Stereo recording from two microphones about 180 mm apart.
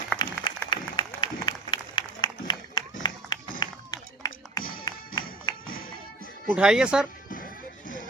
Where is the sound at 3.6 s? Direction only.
20° left (ahead or behind).